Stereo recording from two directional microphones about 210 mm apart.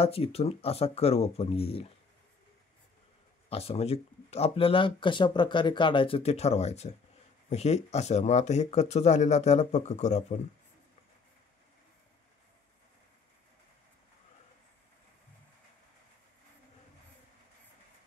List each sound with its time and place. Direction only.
0.0 s speech: 30° left (ahead or behind)
3.4 s speech: 30° left (ahead or behind)